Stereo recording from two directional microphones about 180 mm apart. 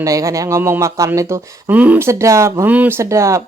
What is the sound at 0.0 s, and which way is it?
Speech, 20° right (ahead or behind).